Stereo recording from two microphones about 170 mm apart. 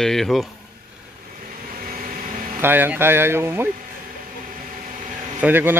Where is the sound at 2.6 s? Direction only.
10° right (ahead or behind).